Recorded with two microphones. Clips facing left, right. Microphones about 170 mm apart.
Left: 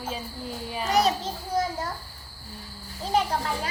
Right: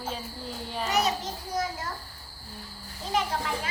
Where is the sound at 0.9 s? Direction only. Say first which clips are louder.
Left 4 dB; 30° left (ahead or behind).